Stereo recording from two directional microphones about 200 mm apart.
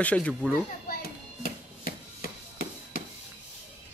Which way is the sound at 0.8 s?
45° left (ahead or behind).